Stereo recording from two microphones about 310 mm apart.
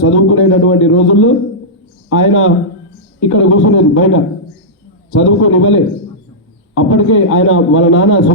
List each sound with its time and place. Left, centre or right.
0.0 s a man's voice: left